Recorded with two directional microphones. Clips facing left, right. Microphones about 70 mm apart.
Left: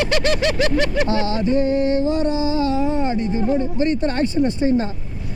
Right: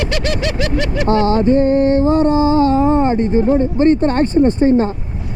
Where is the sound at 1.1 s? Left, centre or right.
Right.